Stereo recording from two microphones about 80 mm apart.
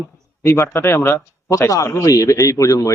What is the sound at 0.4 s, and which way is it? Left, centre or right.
A man's voice, left.